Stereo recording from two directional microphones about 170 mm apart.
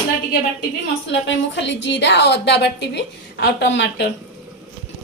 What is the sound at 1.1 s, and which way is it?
A woman's voice, 90° left.